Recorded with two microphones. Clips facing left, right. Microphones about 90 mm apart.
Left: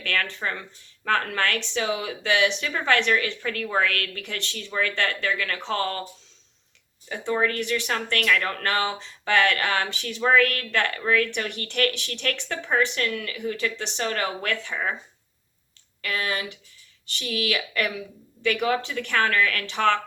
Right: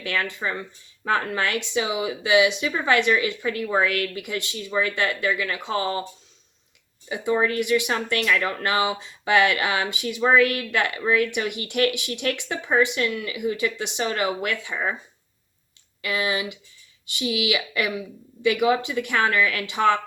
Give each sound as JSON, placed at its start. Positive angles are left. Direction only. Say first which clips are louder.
{"t": 0.0, "sound": "speech", "louder": "right 1 dB", "side_deg": -15}
{"t": 7.1, "sound": "speech", "louder": "right 2 dB", "side_deg": -15}
{"t": 16.0, "sound": "speech", "louder": "right 3 dB", "side_deg": -15}